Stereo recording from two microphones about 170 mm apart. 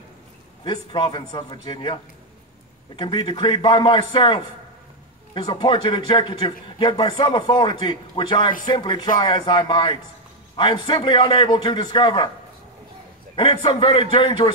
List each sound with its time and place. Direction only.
0.7 s a man's voice: 30° left (ahead or behind)
3.0 s a man's voice: 30° left (ahead or behind)
13.4 s a man's voice: 30° left (ahead or behind)